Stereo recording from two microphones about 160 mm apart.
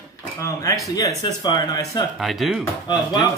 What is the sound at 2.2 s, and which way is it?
Speech, centre (ahead or behind).